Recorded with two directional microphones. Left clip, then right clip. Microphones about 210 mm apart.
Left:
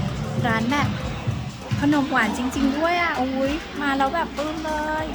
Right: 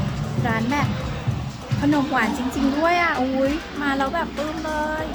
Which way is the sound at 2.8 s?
Centre (ahead or behind).